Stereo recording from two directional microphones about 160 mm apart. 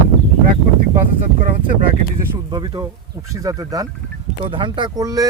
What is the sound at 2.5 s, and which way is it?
Speech, 25° right (ahead or behind).